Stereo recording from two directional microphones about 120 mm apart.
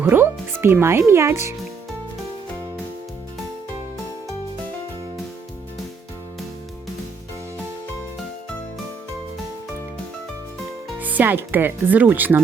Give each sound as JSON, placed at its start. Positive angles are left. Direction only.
{"t": 0.0, "sound": "a child's voice", "side_deg": -20}
{"t": 11.0, "sound": "speech", "side_deg": -15}